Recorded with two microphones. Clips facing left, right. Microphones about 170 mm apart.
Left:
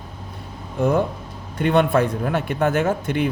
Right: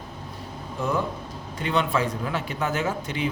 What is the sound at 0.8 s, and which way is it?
Speech, 55° left (ahead or behind).